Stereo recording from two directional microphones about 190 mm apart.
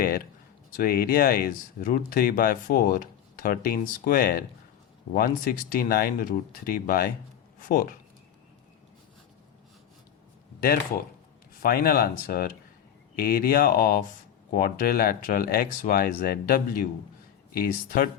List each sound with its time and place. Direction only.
0.8 s speech: 50° left (ahead or behind)
11.6 s speech: 50° left (ahead or behind)